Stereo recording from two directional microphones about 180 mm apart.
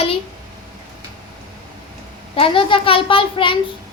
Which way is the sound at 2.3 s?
30° left (ahead or behind).